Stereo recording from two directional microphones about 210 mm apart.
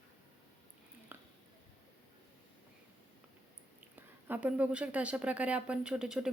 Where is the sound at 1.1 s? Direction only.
10° right (ahead or behind).